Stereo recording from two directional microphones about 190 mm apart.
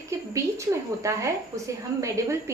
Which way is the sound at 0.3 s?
15° right (ahead or behind).